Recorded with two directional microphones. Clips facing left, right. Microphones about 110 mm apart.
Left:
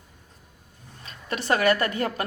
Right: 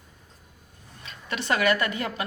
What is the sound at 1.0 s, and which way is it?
A woman's voice, 40° left (ahead or behind).